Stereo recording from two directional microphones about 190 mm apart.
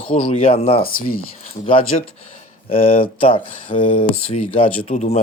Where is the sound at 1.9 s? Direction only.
30° left (ahead or behind).